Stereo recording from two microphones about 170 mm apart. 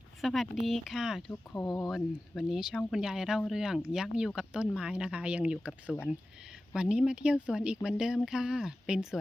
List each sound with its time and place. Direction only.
0.2 s speech: centre (ahead or behind)
1.3 s speech: 20° left (ahead or behind)
2.3 s speech: centre (ahead or behind)